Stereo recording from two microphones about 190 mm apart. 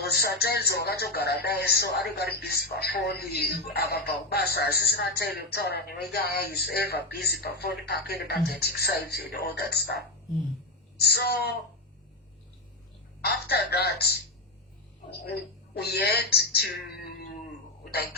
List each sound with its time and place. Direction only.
0.2 s speech: 55° left (ahead or behind)
13.2 s speech: 55° left (ahead or behind)